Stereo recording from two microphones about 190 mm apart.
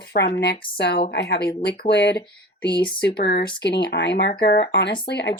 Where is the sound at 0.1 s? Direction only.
55° left (ahead or behind).